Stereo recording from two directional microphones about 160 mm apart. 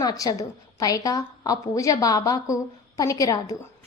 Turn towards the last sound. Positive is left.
turn(degrees=20)  # may be behind; listen again after turning